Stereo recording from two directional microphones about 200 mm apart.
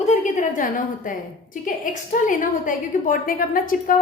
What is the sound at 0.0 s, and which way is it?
A woman's voice, 35° left (ahead or behind).